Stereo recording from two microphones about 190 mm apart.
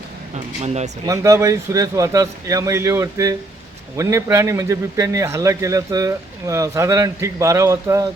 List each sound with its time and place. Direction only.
0.3 s speech: 35° right (ahead or behind)
1.0 s speech: 15° right (ahead or behind)